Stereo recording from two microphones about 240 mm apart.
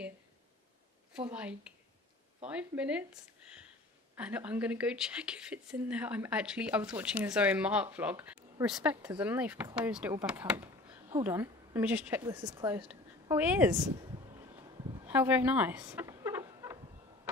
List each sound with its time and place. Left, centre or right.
1.1 s speech: centre
4.2 s speech: centre
15.0 s rodents: centre